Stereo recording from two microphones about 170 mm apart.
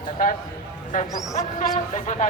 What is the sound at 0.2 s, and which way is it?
A man's voice, 55° left (ahead or behind).